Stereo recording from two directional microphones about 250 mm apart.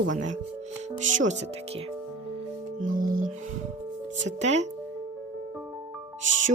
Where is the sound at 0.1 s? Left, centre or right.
Right.